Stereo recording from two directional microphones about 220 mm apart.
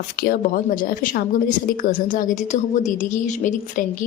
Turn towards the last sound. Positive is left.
turn(degrees=35)  # may be behind; listen again after turning